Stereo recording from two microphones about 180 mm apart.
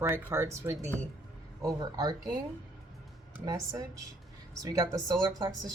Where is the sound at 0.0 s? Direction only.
15° right (ahead or behind).